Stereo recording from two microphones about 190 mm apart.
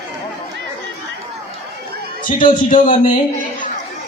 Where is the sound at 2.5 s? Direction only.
45° left (ahead or behind).